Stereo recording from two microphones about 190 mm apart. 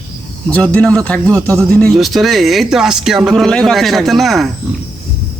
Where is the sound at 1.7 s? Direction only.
5° left (ahead or behind).